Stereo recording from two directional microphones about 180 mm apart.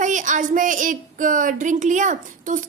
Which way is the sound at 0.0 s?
45° right (ahead or behind).